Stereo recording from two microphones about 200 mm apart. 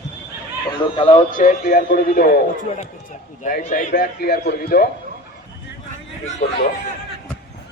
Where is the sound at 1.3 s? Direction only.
40° left (ahead or behind).